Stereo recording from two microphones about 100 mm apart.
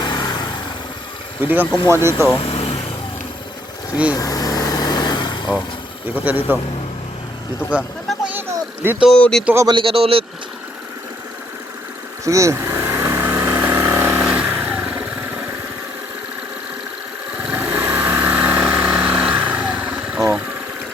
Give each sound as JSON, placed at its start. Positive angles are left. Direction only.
{"t": 0.0, "sound": "vehicle", "side_deg": 45}
{"t": 1.4, "sound": "speech", "side_deg": -20}
{"t": 2.4, "sound": "vehicle", "side_deg": 85}
{"t": 4.1, "sound": "light engine", "side_deg": 35}
{"t": 6.1, "sound": "speech", "side_deg": -20}
{"t": 7.7, "sound": "a sound", "side_deg": -10}
{"t": 9.1, "sound": "speech", "side_deg": 15}
{"t": 9.6, "sound": "speech", "side_deg": -60}
{"t": 12.2, "sound": "vehicle", "side_deg": -30}
{"t": 17.4, "sound": "vehicle", "side_deg": -15}